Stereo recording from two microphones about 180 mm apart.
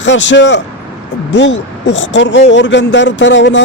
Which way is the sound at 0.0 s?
90° left.